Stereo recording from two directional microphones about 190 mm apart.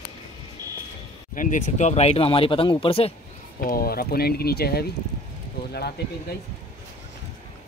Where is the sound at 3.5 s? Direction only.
50° left (ahead or behind).